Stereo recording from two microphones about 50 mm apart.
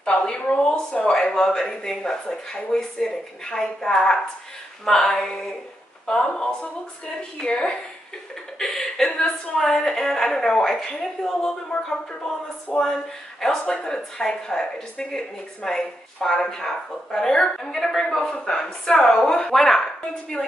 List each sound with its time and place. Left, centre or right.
0.0 s a woman's voice: centre
8.5 s a woman's voice: centre
12.7 s a woman's voice: centre
19.5 s a woman's voice: centre